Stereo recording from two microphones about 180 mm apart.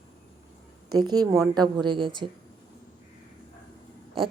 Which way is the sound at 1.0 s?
20° right (ahead or behind).